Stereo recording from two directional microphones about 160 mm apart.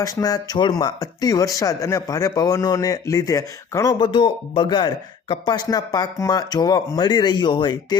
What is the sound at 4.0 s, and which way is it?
Speech, 35° left (ahead or behind).